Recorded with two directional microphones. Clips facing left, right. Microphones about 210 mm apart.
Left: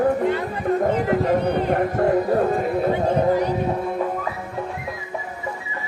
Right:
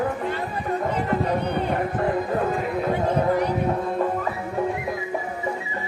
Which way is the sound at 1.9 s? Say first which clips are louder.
Left 6 dB; 40° left (ahead or behind).